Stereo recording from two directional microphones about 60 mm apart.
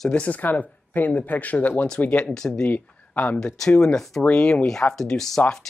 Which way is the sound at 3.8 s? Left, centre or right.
Centre.